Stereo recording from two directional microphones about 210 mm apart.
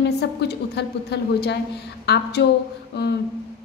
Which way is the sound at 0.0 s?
50° left (ahead or behind).